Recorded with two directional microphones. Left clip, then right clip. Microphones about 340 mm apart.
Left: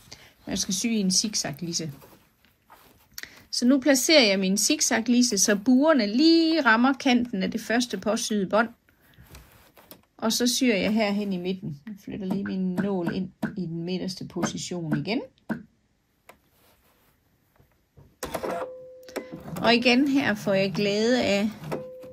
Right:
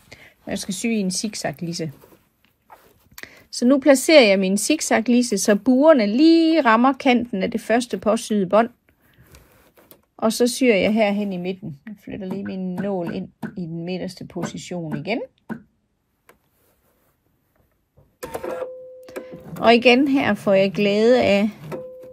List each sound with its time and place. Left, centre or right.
0.1 s speech: centre
3.2 s speech: centre
10.1 s a woman's voice: centre
18.2 s printer: centre
19.6 s speech: centre
21.6 s music: centre